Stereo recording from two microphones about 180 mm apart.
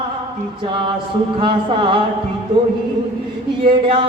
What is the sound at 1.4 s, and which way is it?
Music, 30° right (ahead or behind).